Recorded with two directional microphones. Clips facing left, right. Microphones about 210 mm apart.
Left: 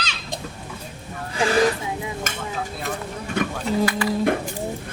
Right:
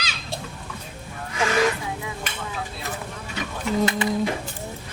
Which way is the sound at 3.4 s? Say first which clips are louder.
Left 9 dB; 50° left (ahead or behind).